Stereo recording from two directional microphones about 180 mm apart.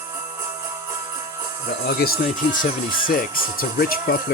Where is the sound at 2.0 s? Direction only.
50° left (ahead or behind).